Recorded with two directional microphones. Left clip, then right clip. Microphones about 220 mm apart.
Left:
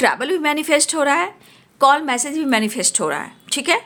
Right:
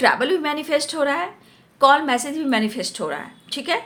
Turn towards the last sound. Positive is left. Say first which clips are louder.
# left 5 dB
turn(degrees=30)  # may be behind; listen again after turning